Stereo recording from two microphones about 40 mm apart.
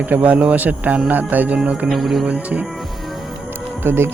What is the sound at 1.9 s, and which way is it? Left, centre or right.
Music, centre.